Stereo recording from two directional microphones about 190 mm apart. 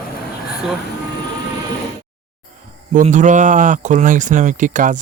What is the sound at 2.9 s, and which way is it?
Speech, 40° right (ahead or behind).